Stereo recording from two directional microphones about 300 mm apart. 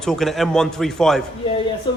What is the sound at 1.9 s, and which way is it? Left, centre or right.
Speech, centre.